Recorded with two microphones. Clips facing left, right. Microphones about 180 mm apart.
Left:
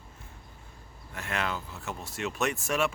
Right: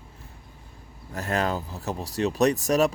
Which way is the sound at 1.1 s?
40° right (ahead or behind).